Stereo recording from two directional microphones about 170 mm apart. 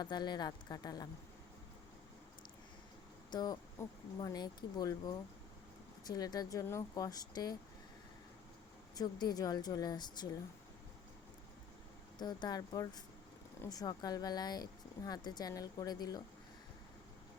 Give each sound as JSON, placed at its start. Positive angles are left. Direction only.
{"t": 0.0, "sound": "speech", "side_deg": 25}
{"t": 3.3, "sound": "speech", "side_deg": 25}
{"t": 9.0, "sound": "speech", "side_deg": 25}
{"t": 12.2, "sound": "speech", "side_deg": 25}